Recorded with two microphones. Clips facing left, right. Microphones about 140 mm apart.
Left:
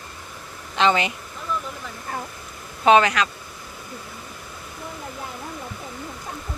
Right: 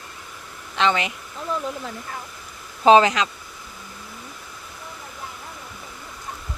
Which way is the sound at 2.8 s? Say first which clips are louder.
Right 2 dB; 25° right (ahead or behind).